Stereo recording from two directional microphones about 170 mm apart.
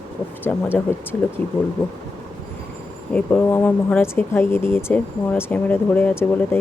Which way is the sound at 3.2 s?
10° left (ahead or behind).